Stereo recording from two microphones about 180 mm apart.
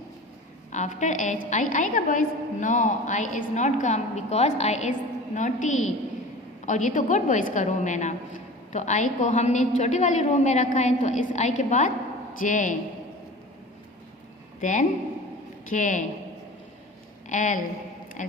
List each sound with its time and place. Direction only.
0.7 s a woman's voice: 40° left (ahead or behind)
14.6 s a woman's voice: 45° left (ahead or behind)
17.2 s a woman's voice: 45° left (ahead or behind)